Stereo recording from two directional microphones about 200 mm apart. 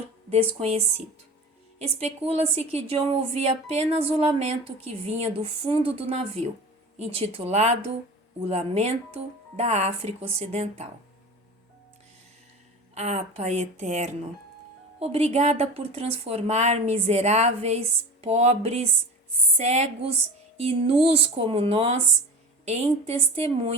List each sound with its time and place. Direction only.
0.3 s a woman's voice: 30° right (ahead or behind)
12.9 s a woman's voice: 35° right (ahead or behind)